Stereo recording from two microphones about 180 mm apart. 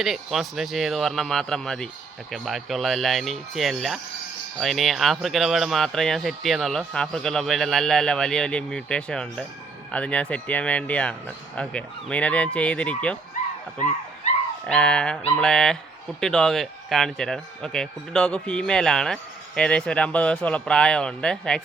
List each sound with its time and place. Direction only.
0.0 s speech: centre (ahead or behind)
14.7 s speech: 5° left (ahead or behind)